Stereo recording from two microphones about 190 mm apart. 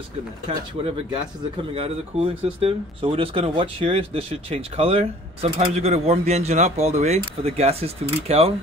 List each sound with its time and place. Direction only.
1.8 s speech: 30° right (ahead or behind)